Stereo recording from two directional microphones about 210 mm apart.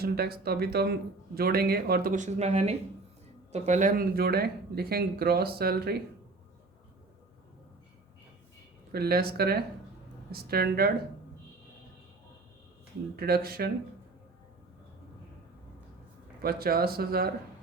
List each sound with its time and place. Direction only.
0.0 s speech: 45° right (ahead or behind)
8.9 s speech: 50° right (ahead or behind)
13.1 s speech: 45° right (ahead or behind)
16.4 s speech: 45° right (ahead or behind)